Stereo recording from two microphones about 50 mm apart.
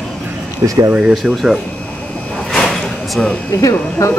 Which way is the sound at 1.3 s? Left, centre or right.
Centre.